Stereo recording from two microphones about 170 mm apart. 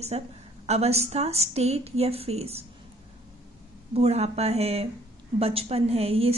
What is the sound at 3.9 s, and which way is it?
A woman's voice, 40° right (ahead or behind).